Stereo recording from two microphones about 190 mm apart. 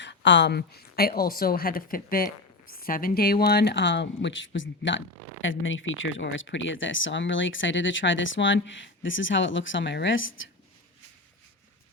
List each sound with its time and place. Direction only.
0.0 s a woman's voice: 70° left (ahead or behind); by 10.5 s 90° left